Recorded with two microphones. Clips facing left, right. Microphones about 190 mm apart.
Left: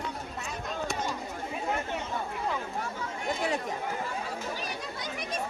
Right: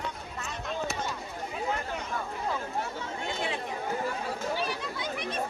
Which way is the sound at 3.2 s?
40° left (ahead or behind).